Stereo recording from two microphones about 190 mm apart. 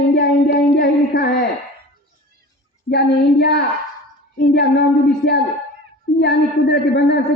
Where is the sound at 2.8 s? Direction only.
60° left (ahead or behind).